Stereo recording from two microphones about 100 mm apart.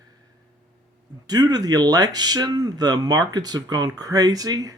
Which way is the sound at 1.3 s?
40° right (ahead or behind).